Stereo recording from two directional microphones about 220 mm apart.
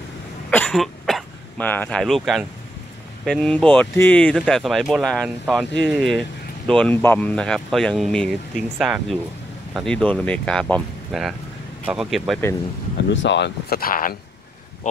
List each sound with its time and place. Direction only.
0.5 s speech: 5° left (ahead or behind)
13.1 s speech: 55° left (ahead or behind)